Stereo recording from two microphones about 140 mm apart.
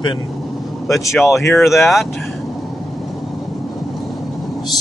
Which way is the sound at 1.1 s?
Centre (ahead or behind).